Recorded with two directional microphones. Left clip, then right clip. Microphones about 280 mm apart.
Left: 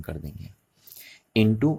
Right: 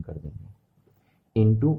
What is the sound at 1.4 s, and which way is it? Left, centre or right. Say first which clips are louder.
Speech: left 2 dB; left.